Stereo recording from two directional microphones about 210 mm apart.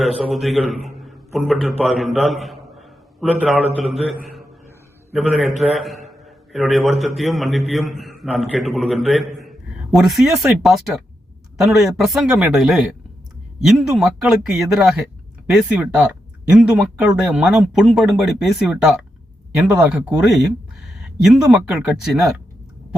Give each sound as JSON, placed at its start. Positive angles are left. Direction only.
{"t": 0.0, "sound": "a man's voice", "side_deg": 0}
{"t": 1.9, "sound": "a sound", "side_deg": 0}
{"t": 3.8, "sound": "a man's voice", "side_deg": 0}